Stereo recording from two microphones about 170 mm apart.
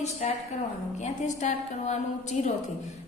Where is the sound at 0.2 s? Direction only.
45° left (ahead or behind).